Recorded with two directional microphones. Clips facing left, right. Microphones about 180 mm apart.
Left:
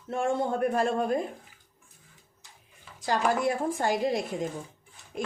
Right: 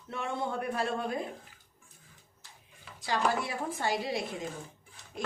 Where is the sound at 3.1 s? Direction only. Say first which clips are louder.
Left 5 dB; 45° left (ahead or behind).